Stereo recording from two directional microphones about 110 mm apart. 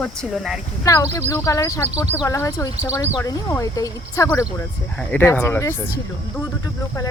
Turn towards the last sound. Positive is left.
turn(degrees=25)  # may be behind; listen again after turning